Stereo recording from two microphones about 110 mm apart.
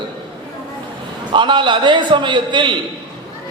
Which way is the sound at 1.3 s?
45° right (ahead or behind).